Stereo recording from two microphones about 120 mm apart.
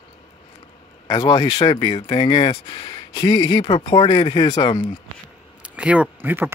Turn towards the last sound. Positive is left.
turn(degrees=-15)  # may be behind; listen again after turning